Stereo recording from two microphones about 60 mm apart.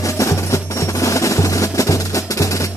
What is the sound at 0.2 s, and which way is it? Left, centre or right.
Music, left.